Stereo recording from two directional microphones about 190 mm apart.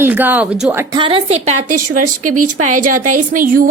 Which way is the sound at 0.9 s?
25° right (ahead or behind).